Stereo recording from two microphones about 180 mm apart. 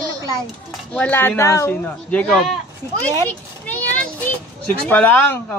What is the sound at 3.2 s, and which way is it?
Children playing, 10° left (ahead or behind).